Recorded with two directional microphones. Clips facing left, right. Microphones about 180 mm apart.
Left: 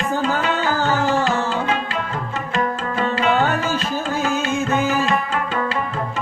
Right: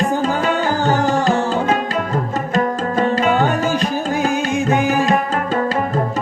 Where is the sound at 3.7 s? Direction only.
15° right (ahead or behind).